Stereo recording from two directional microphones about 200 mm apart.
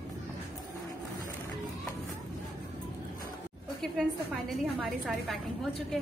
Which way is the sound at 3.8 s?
5° left (ahead or behind).